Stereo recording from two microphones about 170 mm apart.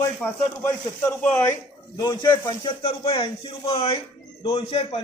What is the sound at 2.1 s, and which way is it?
Speech, 25° left (ahead or behind).